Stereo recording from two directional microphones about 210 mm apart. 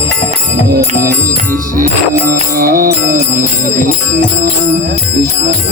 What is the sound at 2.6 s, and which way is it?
Music, 40° right (ahead or behind).